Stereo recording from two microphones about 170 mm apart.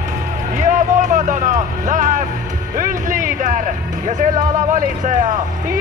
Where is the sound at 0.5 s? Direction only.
50° right (ahead or behind).